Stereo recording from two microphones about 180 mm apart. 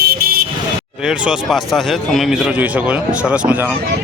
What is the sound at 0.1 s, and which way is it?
Vehicle, 55° right (ahead or behind).